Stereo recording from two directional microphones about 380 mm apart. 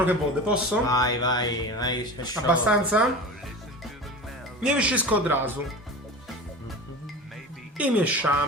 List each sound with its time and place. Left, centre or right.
0.0 s speech: centre
0.9 s speech: centre
2.5 s speech: centre
4.6 s speech: centre
7.8 s speech: centre